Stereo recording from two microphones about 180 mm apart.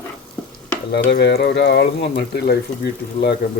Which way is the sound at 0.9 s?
70° left (ahead or behind).